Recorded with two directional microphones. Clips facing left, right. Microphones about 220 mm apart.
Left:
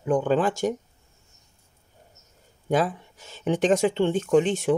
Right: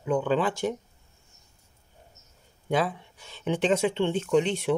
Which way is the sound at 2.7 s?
45° left (ahead or behind).